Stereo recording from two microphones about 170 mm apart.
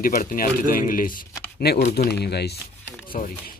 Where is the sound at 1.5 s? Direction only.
70° left (ahead or behind).